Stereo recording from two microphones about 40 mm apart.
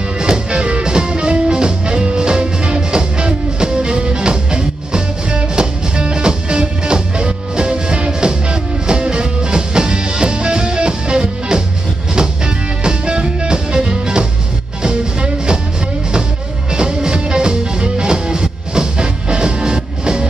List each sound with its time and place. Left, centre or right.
0.2 s music: right
12.8 s music: right
16.7 s music: right